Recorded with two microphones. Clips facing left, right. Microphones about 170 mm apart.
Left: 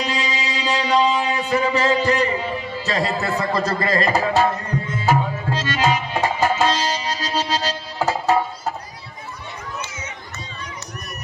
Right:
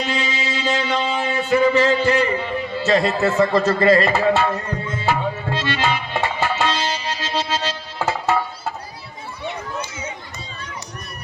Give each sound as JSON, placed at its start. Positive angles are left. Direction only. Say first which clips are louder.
{"t": 0.0, "sound": "music", "louder": "right 1 dB", "side_deg": 40}
{"t": 0.5, "sound": "a sound", "louder": "left 3 dB", "side_deg": 40}
{"t": 1.4, "sound": "speech", "louder": "right 4 dB", "side_deg": 40}
{"t": 5.0, "sound": "tabla", "louder": "left 1 dB", "side_deg": 40}